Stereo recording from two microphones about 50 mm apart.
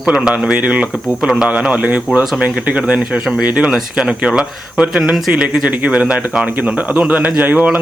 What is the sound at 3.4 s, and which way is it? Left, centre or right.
Speech, right.